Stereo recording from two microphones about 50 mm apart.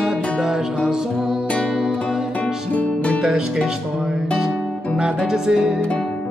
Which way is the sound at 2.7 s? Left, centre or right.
Left.